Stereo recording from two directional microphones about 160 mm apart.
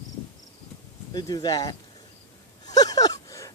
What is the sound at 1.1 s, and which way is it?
Speech, 25° left (ahead or behind).